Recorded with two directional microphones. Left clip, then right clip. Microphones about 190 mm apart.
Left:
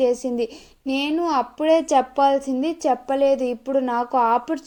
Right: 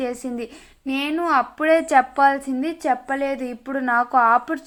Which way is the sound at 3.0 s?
10° left (ahead or behind).